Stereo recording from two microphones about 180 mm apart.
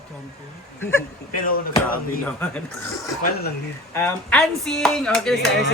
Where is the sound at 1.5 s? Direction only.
50° left (ahead or behind).